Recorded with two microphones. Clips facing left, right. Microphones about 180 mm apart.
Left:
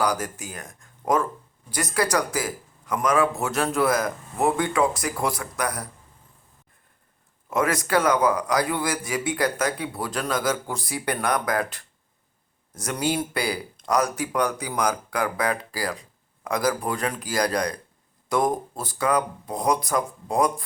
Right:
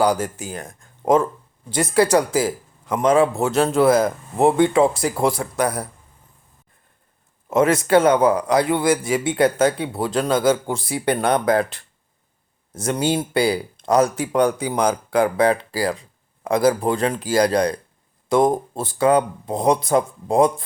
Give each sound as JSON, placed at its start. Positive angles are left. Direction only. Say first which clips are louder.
{"t": 0.0, "sound": "speech", "louder": "right 6 dB", "side_deg": -30}
{"t": 7.5, "sound": "speech", "louder": "right 7 dB", "side_deg": -25}